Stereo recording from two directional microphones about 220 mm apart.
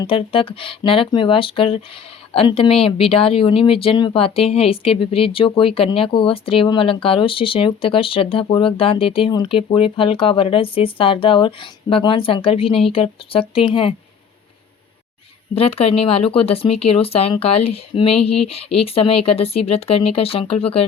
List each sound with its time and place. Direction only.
0.0 s speech: 25° left (ahead or behind)
15.5 s speech: 25° left (ahead or behind)